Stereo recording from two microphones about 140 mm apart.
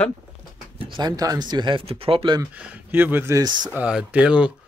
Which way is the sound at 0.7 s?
30° right (ahead or behind).